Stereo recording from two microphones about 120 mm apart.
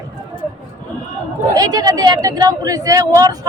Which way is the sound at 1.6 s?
30° right (ahead or behind).